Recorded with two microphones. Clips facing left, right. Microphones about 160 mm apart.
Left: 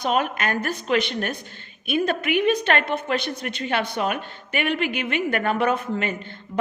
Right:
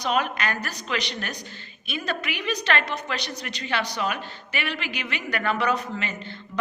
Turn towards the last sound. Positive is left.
turn(degrees=50)  # may be behind; listen again after turning